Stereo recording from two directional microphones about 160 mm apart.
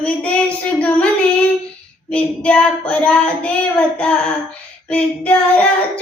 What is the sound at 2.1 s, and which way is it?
Child singing, 5° left (ahead or behind).